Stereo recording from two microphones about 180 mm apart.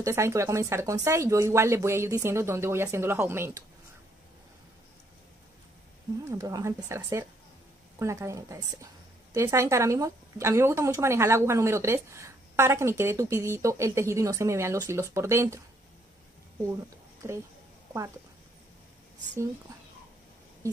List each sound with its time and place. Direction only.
0.0 s a woman's voice: 15° right (ahead or behind)
6.3 s a woman's voice: 20° right (ahead or behind)